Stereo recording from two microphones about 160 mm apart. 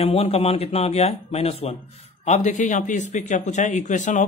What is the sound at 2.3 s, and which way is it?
Speech, 50° left (ahead or behind).